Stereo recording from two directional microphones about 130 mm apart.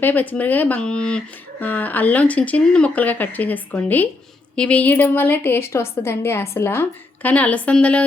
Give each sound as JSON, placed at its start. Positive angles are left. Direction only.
{"t": 0.0, "sound": "a woman's voice", "side_deg": 15}